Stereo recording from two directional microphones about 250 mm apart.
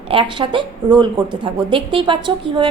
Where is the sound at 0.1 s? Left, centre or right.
Centre.